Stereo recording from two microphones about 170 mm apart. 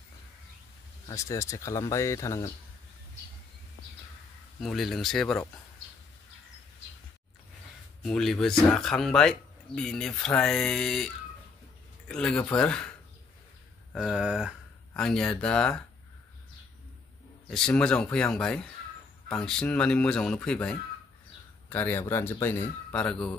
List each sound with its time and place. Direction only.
1.0 s speech: 20° left (ahead or behind)
4.6 s speech: centre (ahead or behind)
8.0 s speech: 5° left (ahead or behind)
13.9 s speech: 5° right (ahead or behind)
17.5 s speech: 5° left (ahead or behind)